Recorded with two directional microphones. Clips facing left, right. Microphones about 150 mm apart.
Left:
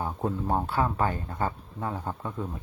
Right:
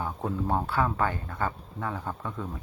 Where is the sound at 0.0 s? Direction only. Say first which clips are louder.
Left 1 dB; 15° left (ahead or behind).